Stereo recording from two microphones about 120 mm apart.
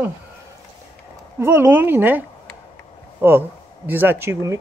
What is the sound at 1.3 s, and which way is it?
Speech, 20° right (ahead or behind).